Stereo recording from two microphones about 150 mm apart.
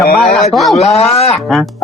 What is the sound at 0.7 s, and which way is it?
Speech, 45° left (ahead or behind).